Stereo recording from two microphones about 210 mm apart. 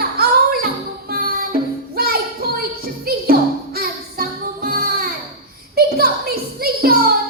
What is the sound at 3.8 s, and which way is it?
Child singing, 45° right (ahead or behind).